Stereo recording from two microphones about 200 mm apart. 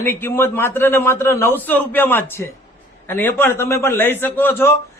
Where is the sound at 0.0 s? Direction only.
10° left (ahead or behind).